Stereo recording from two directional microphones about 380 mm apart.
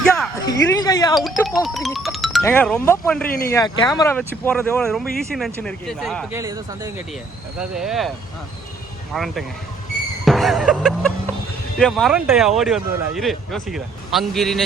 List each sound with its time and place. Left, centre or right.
0.2 s speech: centre
3.2 s speech: left
3.5 s speech: centre
9.1 s speech: centre